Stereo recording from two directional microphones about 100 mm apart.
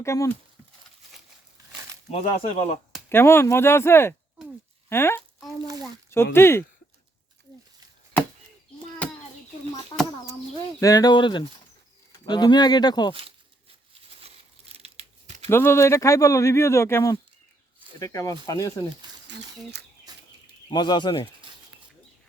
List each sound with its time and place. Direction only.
0.0 s speech: 30° left (ahead or behind)
2.0 s speech: 90° left
3.1 s speech: 25° left (ahead or behind)
10.8 s speech: 40° left (ahead or behind)
14.8 s a sound: 90° right
15.4 s speech: 25° left (ahead or behind)
20.1 s bird: 40° right (ahead or behind)
20.7 s speech: 45° left (ahead or behind)